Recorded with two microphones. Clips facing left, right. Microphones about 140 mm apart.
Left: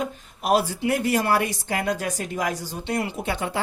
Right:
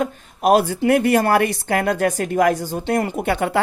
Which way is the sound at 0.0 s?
50° right (ahead or behind).